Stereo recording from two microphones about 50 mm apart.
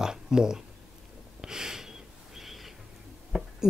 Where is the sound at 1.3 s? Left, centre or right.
Centre.